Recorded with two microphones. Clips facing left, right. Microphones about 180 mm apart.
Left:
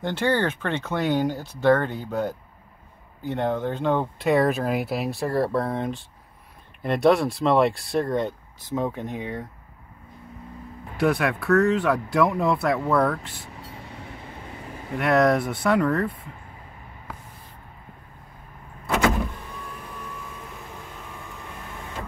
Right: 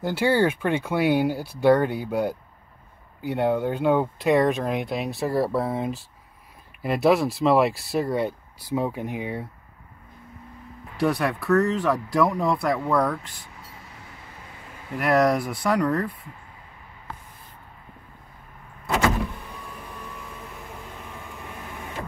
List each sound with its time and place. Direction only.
0.0 s speech: 10° right (ahead or behind)
11.0 s speech: centre (ahead or behind)
13.7 s train: 30° left (ahead or behind)
15.0 s speech: centre (ahead or behind)